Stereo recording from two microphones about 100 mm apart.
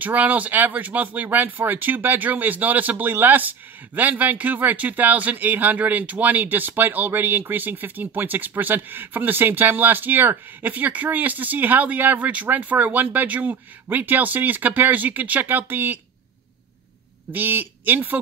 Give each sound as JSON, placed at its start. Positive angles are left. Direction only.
{"t": 0.0, "sound": "speech", "side_deg": -15}
{"t": 17.3, "sound": "speech", "side_deg": -20}